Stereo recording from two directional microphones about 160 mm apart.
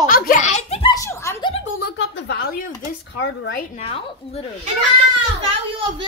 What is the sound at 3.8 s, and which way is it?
Speech, 35° left (ahead or behind).